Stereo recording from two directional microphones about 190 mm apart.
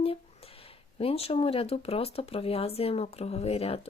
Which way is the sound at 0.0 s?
30° left (ahead or behind).